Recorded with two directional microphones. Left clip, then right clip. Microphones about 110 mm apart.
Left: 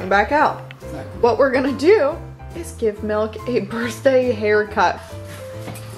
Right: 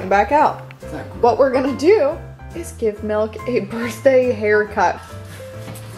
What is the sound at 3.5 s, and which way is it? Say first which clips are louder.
Speech: right 1 dB; 15° right (ahead or behind).